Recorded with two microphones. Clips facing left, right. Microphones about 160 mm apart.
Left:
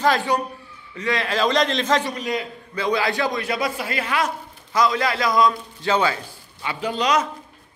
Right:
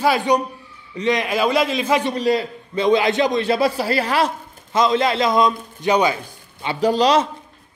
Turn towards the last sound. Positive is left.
turn(degrees=-35)  # may be behind; listen again after turning